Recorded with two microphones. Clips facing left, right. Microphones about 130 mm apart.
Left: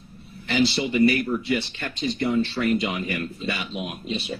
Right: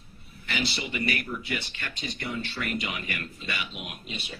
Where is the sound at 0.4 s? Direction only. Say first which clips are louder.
Left 10 dB; 30° left (ahead or behind).